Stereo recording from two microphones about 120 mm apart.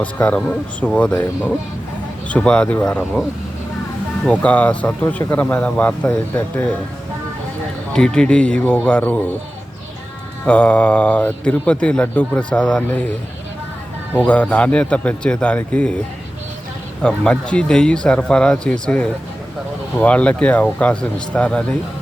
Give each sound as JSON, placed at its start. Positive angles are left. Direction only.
{"t": 0.0, "sound": "a man's voice", "side_deg": 15}
{"t": 2.3, "sound": "a man's voice", "side_deg": 10}
{"t": 4.3, "sound": "a man's voice", "side_deg": 10}
{"t": 7.9, "sound": "a man's voice", "side_deg": 5}
{"t": 10.4, "sound": "a man's voice", "side_deg": 10}
{"t": 14.2, "sound": "a man's voice", "side_deg": 10}
{"t": 17.0, "sound": "a man's voice", "side_deg": 10}